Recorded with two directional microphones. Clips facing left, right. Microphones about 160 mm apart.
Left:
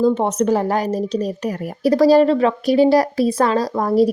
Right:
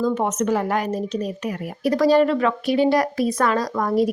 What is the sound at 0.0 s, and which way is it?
Speech, 30° left (ahead or behind).